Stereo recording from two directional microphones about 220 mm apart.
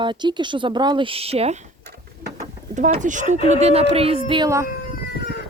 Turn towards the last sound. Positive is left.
turn(degrees=45)  # may be behind; listen again after turning